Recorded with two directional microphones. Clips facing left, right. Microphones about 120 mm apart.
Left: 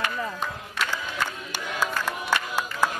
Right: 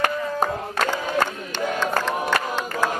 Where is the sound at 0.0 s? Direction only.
45° right (ahead or behind).